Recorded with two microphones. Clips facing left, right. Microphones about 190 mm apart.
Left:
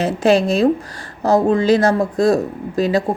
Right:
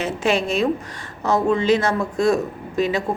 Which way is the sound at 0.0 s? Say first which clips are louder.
Left 6 dB; 35° left (ahead or behind).